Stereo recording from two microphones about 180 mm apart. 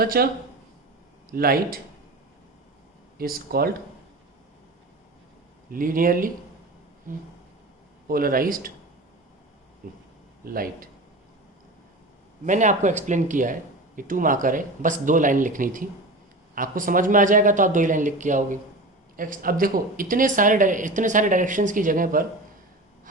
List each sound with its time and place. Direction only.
0.0 s speech: 55° right (ahead or behind)
1.3 s speech: 55° right (ahead or behind)
3.2 s speech: 55° right (ahead or behind)
5.7 s speech: 50° right (ahead or behind)
10.4 s speech: 55° right (ahead or behind)
12.5 s speech: 45° right (ahead or behind)